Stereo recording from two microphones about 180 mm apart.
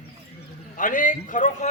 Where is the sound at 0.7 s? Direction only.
45° left (ahead or behind).